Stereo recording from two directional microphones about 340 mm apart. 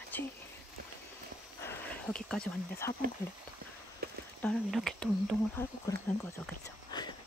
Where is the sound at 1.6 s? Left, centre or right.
Centre.